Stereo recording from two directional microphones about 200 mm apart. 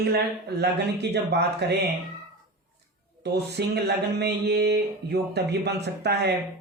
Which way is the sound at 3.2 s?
55° right (ahead or behind).